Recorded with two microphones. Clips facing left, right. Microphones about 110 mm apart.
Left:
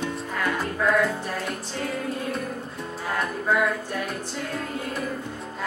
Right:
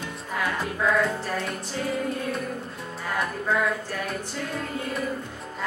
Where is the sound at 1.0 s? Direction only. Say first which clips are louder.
Even; centre (ahead or behind).